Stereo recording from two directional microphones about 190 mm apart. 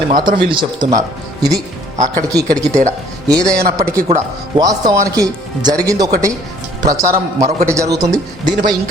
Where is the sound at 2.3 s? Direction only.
20° right (ahead or behind).